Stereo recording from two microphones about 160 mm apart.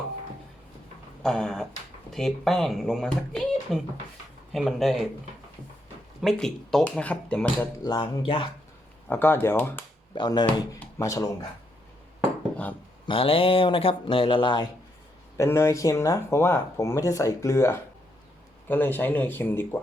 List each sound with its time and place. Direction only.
1.2 s speech: 5° left (ahead or behind)
6.2 s speech: 5° left (ahead or behind)
7.9 s speech: 25° left (ahead or behind)
9.0 s speech: 15° left (ahead or behind)
10.2 s speech: 30° left (ahead or behind)
13.1 s speech: 35° left (ahead or behind)
15.4 s speech: 15° left (ahead or behind)